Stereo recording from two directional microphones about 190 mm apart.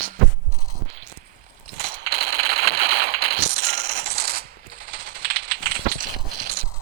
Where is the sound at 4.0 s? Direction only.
55° right (ahead or behind).